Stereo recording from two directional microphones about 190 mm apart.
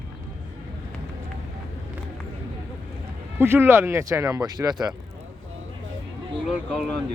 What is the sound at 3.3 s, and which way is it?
Speech, 10° right (ahead or behind).